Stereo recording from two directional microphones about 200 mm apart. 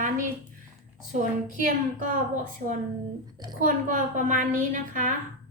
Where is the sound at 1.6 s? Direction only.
40° right (ahead or behind).